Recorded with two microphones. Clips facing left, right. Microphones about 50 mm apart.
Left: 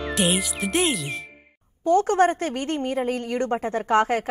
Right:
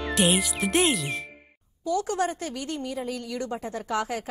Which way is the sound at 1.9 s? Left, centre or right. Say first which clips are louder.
Left 8 dB; left.